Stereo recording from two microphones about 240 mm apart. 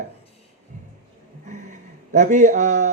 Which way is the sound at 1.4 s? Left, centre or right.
Right.